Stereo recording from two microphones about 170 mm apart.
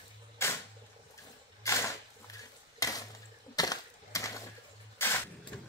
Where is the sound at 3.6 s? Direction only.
20° left (ahead or behind).